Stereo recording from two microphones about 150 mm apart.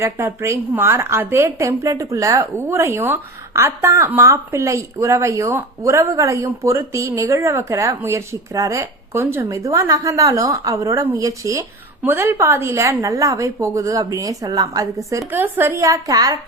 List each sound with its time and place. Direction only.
0.0 s a woman's voice: 15° right (ahead or behind)